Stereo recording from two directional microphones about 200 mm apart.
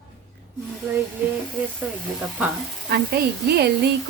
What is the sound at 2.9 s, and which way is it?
A woman's voice, 55° right (ahead or behind).